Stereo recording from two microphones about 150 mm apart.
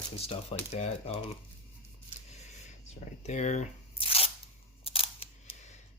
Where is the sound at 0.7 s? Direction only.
45° left (ahead or behind).